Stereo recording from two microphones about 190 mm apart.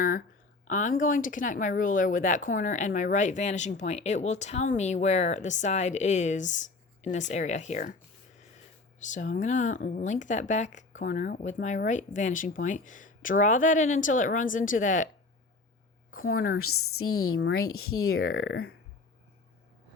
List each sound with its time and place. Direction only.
0.0 s a sound: 45° left (ahead or behind)
0.7 s speech: 40° left (ahead or behind)
9.0 s speech: 40° left (ahead or behind)
16.1 s a woman's voice: 50° left (ahead or behind)
17.1 s speech: 90° left